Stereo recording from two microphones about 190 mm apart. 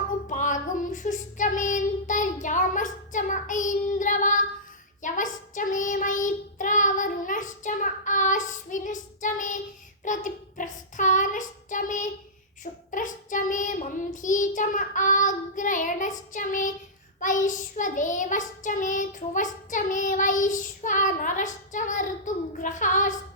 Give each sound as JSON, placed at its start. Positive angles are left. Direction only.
{"t": 0.3, "sound": "child singing", "side_deg": 40}